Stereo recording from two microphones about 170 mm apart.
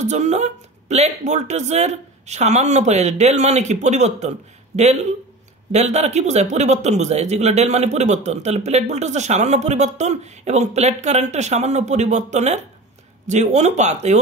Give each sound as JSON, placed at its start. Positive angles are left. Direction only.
{"t": 0.0, "sound": "speech", "side_deg": -45}